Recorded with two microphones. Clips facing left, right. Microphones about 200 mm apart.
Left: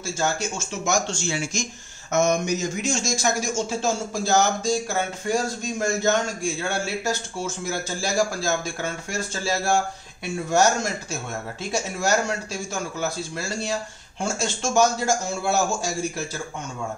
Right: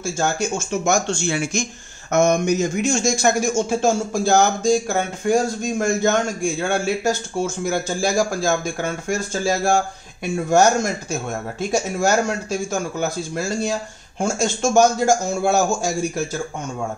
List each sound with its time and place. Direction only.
0.0 s speech: 50° right (ahead or behind)